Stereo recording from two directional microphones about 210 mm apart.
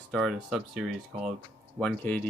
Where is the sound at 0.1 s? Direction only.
Centre (ahead or behind).